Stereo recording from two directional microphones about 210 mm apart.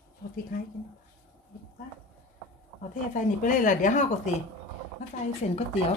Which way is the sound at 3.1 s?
40° left (ahead or behind).